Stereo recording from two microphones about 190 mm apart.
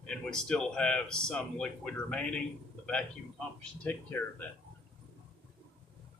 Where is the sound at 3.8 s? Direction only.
10° left (ahead or behind).